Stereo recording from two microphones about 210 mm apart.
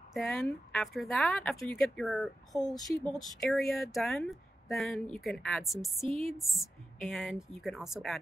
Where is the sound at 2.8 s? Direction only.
Centre (ahead or behind).